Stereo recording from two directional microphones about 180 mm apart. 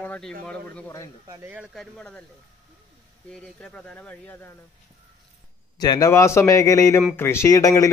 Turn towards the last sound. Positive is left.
turn(degrees=20)  # may be behind; listen again after turning